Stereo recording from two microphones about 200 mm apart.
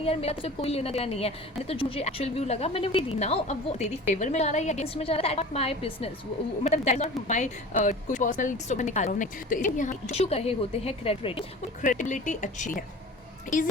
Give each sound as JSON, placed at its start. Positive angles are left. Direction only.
{"t": 0.0, "sound": "a woman's voice", "side_deg": 30}
{"t": 11.8, "sound": "a woman's voice", "side_deg": 40}